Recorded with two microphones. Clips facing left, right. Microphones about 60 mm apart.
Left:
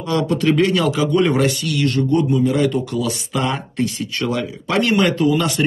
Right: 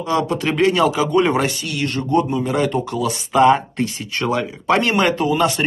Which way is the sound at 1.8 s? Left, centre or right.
Centre.